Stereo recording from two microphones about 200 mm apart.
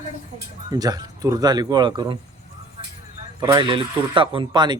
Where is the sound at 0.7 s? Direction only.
20° right (ahead or behind).